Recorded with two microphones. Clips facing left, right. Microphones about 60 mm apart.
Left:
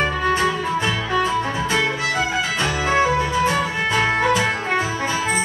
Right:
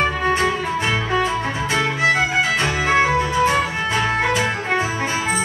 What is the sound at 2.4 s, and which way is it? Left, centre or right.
Music, right.